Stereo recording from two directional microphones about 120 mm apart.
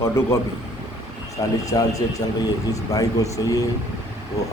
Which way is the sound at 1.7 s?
30° left (ahead or behind).